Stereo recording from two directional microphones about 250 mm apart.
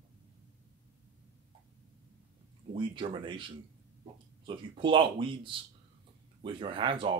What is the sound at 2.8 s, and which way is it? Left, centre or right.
Speech, centre.